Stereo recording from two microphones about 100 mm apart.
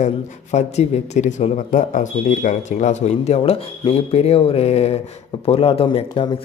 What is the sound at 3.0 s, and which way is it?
Speech, 85° left.